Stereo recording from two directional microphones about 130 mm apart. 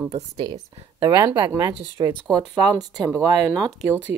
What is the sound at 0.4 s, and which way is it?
Speech, 30° right (ahead or behind).